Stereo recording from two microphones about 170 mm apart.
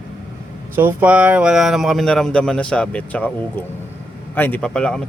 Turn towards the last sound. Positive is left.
turn(degrees=5)  # may be behind; listen again after turning